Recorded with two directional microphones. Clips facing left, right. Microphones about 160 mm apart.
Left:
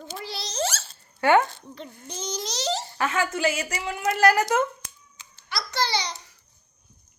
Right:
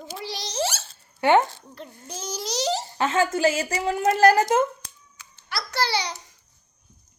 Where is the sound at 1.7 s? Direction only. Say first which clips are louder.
Even; 5° right (ahead or behind).